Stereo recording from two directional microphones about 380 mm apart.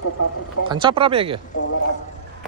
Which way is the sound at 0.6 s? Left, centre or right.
Centre.